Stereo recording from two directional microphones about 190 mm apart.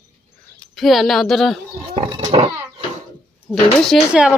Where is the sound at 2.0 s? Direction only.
25° right (ahead or behind).